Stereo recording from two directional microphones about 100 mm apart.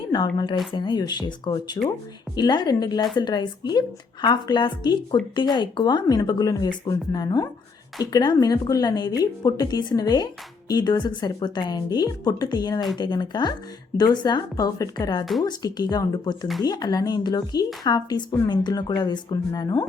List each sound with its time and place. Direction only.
0.1 s speech: 45° left (ahead or behind)
15.2 s a woman's voice: centre (ahead or behind)
15.4 s speech: 40° left (ahead or behind)